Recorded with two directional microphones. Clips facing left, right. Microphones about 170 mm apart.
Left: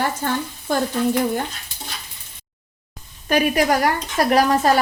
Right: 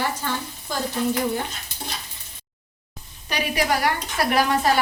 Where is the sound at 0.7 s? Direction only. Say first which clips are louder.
Left 8 dB; 55° left (ahead or behind).